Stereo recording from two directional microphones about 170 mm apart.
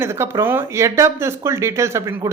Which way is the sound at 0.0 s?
15° right (ahead or behind).